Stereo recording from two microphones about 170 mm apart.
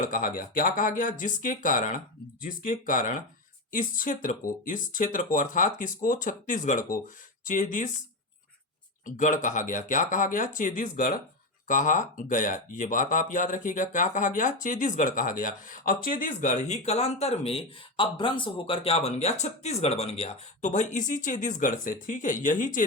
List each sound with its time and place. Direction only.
0.0 s speech: 55° left (ahead or behind)
9.0 s speech: 50° left (ahead or behind)